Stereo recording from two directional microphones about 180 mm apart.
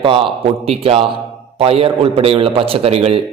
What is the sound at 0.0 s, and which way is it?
A man's voice, 30° right (ahead or behind).